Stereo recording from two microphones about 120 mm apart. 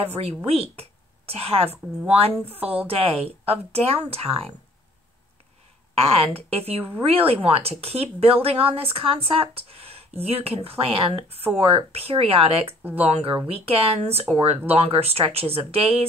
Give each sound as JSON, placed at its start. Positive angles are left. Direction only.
{"t": 0.0, "sound": "speech", "side_deg": -60}
{"t": 5.9, "sound": "speech", "side_deg": -55}